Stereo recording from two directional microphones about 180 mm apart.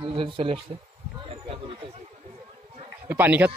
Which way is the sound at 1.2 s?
30° right (ahead or behind).